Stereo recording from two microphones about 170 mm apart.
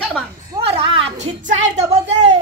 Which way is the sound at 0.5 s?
20° right (ahead or behind).